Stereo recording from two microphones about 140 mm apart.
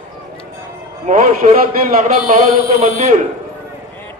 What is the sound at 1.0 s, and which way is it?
Speech, 65° right (ahead or behind).